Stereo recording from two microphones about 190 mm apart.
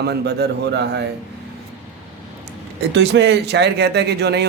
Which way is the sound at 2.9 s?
65° right (ahead or behind).